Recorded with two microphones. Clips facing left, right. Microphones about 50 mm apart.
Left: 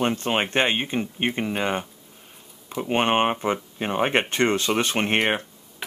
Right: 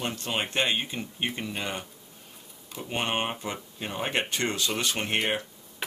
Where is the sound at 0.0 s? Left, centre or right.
Left.